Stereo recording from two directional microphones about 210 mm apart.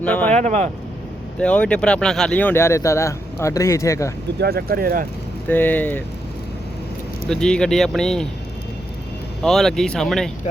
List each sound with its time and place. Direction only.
0.0 s speech: 5° left (ahead or behind)
0.3 s speech: 35° right (ahead or behind)
1.4 s speech: 5° left (ahead or behind)
4.4 s speech: 50° right (ahead or behind)
5.5 s speech: 10° left (ahead or behind)
7.3 s speech: 5° left (ahead or behind)
9.4 s speech: centre (ahead or behind)